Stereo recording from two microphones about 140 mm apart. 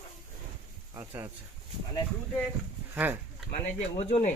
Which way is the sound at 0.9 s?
20° right (ahead or behind).